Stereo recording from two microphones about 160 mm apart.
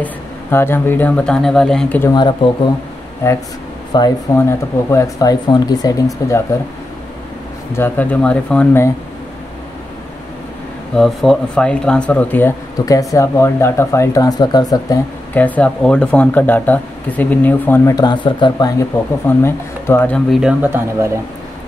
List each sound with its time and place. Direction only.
0.0 s speech: 15° left (ahead or behind)
2.0 s speech: 30° left (ahead or behind)
3.9 s speech: 20° left (ahead or behind)
7.7 s speech: 10° left (ahead or behind)
11.0 s speech: 5° left (ahead or behind); by 15.0 s 25° left (ahead or behind)
15.3 s speech: 10° left (ahead or behind); by 18.7 s 30° left (ahead or behind)
18.8 s speech: 15° left (ahead or behind)
20.2 s speech: 5° right (ahead or behind)